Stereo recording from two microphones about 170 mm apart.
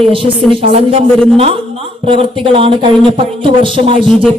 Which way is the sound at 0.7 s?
35° right (ahead or behind).